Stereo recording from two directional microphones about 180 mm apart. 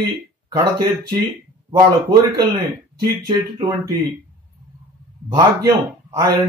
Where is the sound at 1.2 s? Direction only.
20° right (ahead or behind).